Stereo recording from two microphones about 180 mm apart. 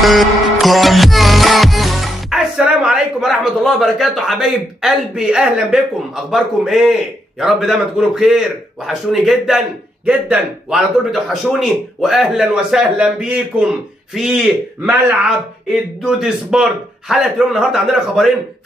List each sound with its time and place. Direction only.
0.0 s music: centre (ahead or behind)
10.0 s a man's voice: 5° right (ahead or behind)